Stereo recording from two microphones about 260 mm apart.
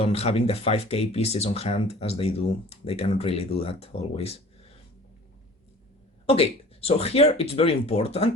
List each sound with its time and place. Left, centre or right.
0.0 s speech: left
6.2 s speech: left